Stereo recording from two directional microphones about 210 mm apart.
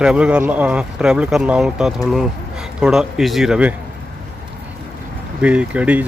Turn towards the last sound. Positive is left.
turn(degrees=-5)  # may be behind; listen again after turning